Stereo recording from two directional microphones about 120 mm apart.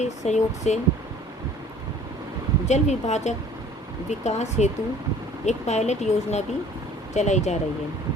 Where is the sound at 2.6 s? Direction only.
70° left (ahead or behind).